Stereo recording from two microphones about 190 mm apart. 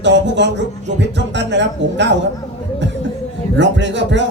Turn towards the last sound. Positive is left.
turn(degrees=-70)  # may be behind; listen again after turning